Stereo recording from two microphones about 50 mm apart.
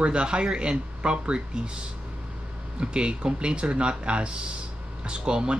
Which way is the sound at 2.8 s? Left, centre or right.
Centre.